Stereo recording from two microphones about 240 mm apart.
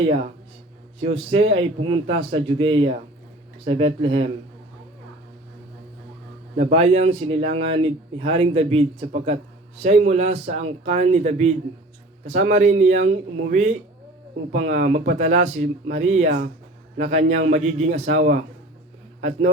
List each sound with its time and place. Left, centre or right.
1.0 s speech: right
6.6 s speech: right